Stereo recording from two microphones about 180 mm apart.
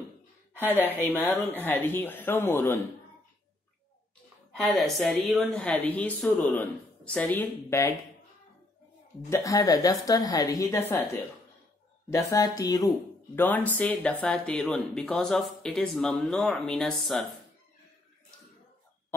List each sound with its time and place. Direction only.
1.0 s a woman's voice: 10° left (ahead or behind)
4.6 s a woman's voice: centre (ahead or behind)
9.3 s a woman's voice: 20° left (ahead or behind)
13.4 s a woman's voice: 10° left (ahead or behind)